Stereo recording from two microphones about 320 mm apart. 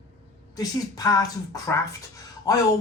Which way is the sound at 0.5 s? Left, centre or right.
Centre.